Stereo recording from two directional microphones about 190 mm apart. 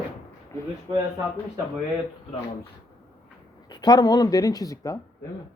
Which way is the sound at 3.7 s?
20° left (ahead or behind).